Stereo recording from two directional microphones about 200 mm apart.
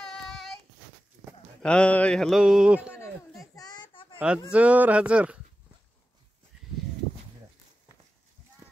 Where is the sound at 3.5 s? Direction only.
20° left (ahead or behind).